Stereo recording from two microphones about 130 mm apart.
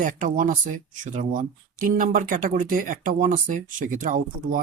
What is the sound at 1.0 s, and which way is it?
Speech, 70° right (ahead or behind).